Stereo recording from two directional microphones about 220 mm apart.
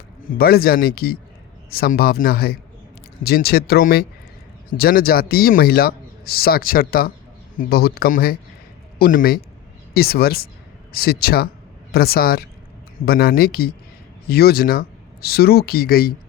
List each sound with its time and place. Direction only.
0.3 s a man's voice: 45° left (ahead or behind)